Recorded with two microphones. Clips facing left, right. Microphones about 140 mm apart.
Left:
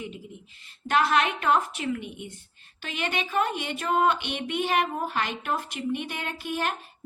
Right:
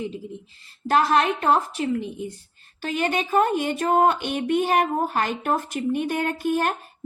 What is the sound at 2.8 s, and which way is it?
Speech, 40° right (ahead or behind).